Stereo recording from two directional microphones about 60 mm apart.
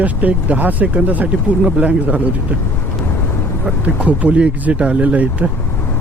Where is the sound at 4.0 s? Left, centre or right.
Right.